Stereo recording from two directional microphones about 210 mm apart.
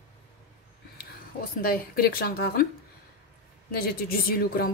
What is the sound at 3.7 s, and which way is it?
A woman's voice, 45° left (ahead or behind).